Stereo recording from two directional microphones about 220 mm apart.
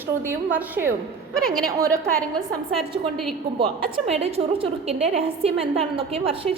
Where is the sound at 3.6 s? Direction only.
25° right (ahead or behind).